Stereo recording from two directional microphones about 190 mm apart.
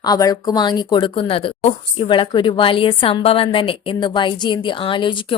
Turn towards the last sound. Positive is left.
turn(degrees=25)  # may be behind; listen again after turning